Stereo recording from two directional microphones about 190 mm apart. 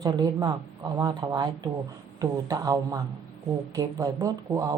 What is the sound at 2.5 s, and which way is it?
A woman's voice, 20° right (ahead or behind).